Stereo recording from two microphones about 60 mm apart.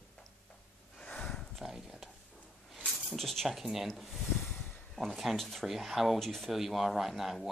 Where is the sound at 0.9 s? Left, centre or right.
Centre.